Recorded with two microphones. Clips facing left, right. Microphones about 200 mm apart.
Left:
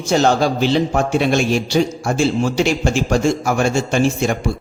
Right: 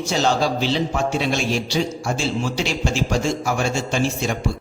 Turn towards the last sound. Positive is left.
turn(degrees=55)  # may be behind; listen again after turning